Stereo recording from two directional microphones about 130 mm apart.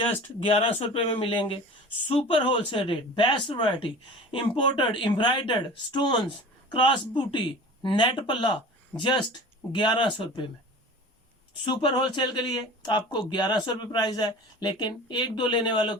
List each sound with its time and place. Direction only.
0.0 s speech: 50° left (ahead or behind)
11.6 s speech: 35° left (ahead or behind)